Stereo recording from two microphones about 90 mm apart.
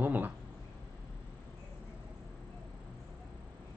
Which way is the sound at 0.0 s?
20° right (ahead or behind).